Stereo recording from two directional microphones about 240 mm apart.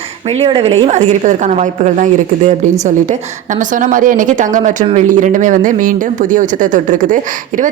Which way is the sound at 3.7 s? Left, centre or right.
Right.